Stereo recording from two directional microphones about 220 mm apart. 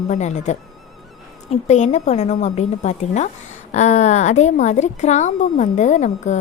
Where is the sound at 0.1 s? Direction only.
30° left (ahead or behind).